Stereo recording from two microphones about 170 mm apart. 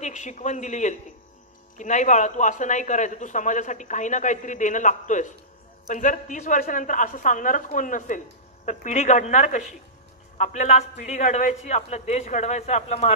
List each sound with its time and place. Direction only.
0.0 s a man's voice: 45° left (ahead or behind)